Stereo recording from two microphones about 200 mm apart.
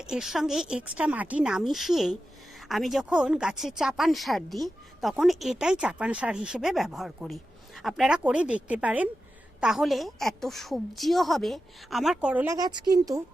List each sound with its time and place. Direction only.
0.0 s a woman's voice: 5° right (ahead or behind)
12.5 s speech: 20° right (ahead or behind)